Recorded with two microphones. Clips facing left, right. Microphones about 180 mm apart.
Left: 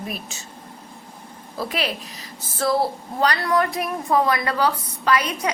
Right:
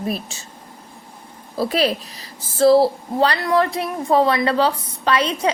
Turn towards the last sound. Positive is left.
turn(degrees=-30)  # may be behind; listen again after turning